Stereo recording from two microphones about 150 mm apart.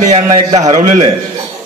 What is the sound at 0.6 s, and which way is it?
Speech, 50° right (ahead or behind).